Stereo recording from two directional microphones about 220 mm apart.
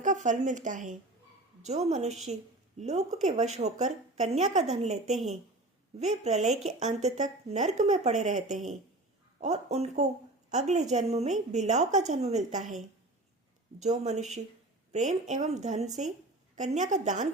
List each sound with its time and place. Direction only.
0.0 s a woman's voice: 35° right (ahead or behind)
5.1 s a woman's voice: centre (ahead or behind)
6.0 s a woman's voice: 30° right (ahead or behind)
13.7 s a woman's voice: 30° right (ahead or behind)